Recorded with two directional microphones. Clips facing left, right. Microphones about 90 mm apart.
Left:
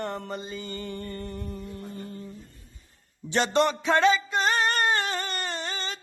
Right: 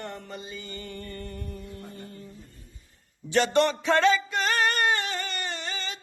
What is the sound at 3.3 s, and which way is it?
Music, 25° left (ahead or behind).